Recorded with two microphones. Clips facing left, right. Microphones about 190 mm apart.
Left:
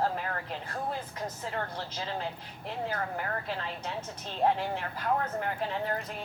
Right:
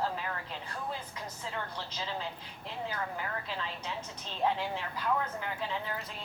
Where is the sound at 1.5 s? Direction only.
50° left (ahead or behind).